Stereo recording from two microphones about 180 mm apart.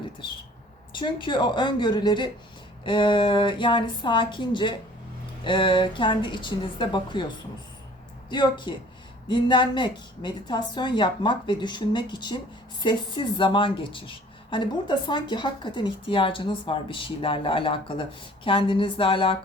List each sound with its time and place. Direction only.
0.9 s a woman's voice: 25° left (ahead or behind)